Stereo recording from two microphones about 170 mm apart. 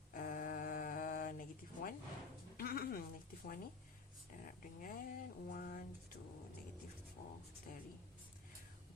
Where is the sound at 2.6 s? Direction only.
60° left (ahead or behind).